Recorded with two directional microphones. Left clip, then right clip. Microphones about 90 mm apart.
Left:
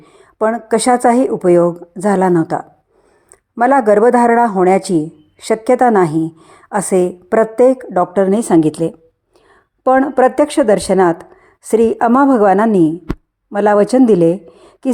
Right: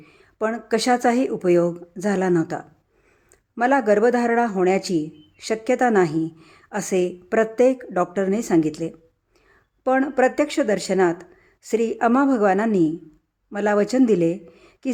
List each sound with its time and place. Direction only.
0.0 s a man's voice: 30° left (ahead or behind); by 9.0 s 50° left (ahead or behind)
9.8 s speech: 40° left (ahead or behind)